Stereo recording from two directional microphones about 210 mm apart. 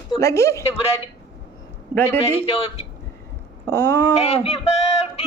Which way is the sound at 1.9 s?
15° right (ahead or behind).